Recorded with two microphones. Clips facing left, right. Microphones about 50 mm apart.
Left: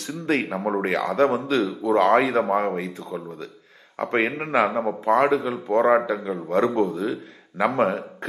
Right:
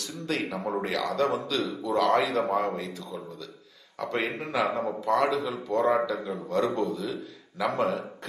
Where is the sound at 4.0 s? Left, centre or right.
Left.